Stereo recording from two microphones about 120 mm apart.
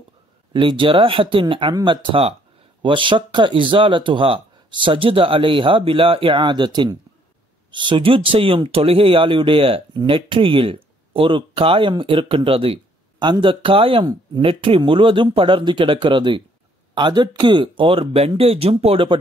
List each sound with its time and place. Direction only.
0.5 s speech: 45° right (ahead or behind)